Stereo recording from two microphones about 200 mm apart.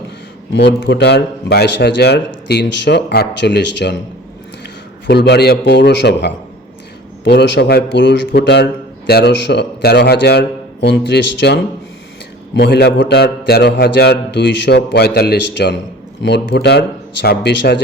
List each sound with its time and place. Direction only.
0.5 s a man's voice: 60° left (ahead or behind)
5.0 s a man's voice: 55° left (ahead or behind)